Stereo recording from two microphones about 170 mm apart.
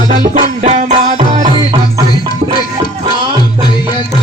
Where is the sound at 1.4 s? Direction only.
30° right (ahead or behind).